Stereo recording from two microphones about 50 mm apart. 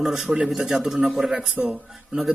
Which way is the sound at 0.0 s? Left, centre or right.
Centre.